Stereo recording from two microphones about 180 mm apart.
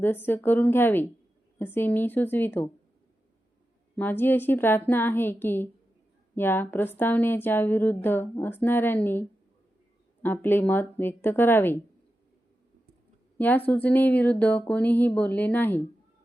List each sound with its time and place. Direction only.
0.0 s speech: 10° left (ahead or behind)
3.9 s speech: 10° left (ahead or behind)
10.2 s speech: 10° left (ahead or behind)
13.4 s speech: 10° left (ahead or behind)